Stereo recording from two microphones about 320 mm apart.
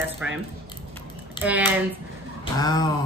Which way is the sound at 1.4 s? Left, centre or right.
Centre.